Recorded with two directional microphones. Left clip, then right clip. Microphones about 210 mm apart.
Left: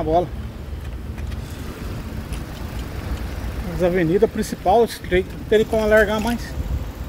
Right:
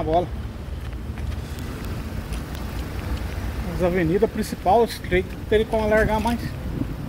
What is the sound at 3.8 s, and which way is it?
Speech, 20° left (ahead or behind).